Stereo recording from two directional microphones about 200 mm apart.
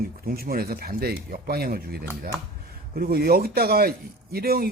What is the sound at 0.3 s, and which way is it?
A man's voice, 50° right (ahead or behind).